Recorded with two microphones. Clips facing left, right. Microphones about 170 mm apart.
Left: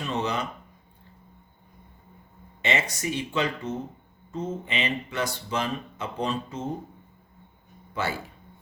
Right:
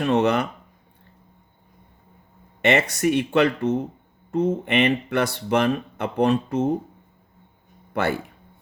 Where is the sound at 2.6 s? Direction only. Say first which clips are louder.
Right 8 dB; 60° right (ahead or behind).